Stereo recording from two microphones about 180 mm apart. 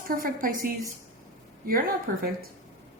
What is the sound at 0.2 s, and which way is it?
Speech, 50° right (ahead or behind).